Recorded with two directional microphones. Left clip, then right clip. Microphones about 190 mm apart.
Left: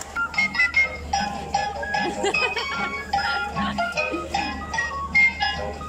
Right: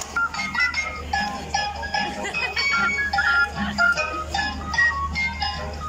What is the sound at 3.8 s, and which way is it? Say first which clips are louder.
Music: right 8 dB; 15° left (ahead or behind).